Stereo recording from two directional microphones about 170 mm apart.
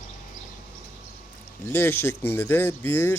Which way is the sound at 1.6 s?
15° left (ahead or behind).